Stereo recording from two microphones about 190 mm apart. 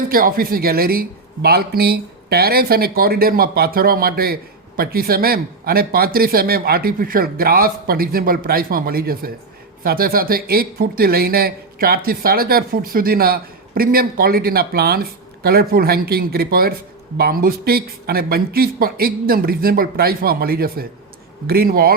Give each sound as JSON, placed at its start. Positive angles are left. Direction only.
{"t": 0.1, "sound": "speech", "side_deg": -50}